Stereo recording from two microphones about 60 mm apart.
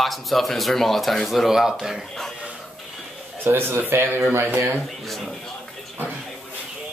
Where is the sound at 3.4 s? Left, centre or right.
Right.